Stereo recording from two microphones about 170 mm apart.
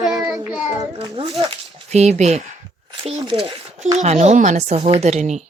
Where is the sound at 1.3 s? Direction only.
40° right (ahead or behind).